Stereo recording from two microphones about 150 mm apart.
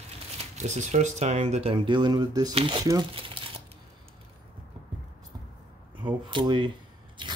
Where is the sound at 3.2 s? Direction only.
35° right (ahead or behind).